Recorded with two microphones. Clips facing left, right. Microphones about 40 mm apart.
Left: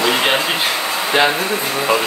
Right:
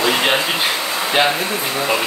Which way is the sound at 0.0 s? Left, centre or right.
Centre.